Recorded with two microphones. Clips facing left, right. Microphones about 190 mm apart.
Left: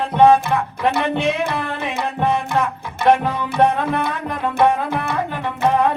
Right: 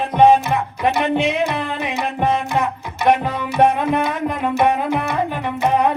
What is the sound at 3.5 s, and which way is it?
Tabla, 15° right (ahead or behind).